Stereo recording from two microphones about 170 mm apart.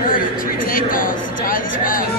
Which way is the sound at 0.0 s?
55° left (ahead or behind).